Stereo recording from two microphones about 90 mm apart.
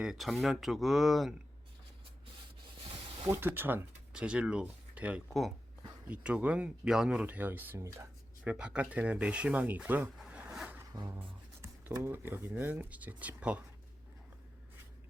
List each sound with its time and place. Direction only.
0.0 s speech: 5° right (ahead or behind)
3.2 s speech: 25° right (ahead or behind)
4.1 s speech: 10° right (ahead or behind)
7.3 s speech: 20° right (ahead or behind)
10.2 s zipper: 5° right (ahead or behind)
10.9 s a sound: 50° right (ahead or behind)
12.0 s speech: 25° right (ahead or behind)